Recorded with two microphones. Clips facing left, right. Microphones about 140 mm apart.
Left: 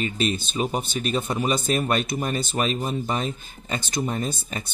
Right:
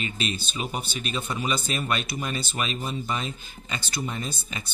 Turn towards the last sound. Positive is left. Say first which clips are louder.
# left 5 dB
turn(degrees=45)  # may be behind; listen again after turning